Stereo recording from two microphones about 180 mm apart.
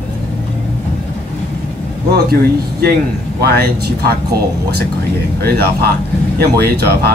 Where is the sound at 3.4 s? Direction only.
60° right (ahead or behind).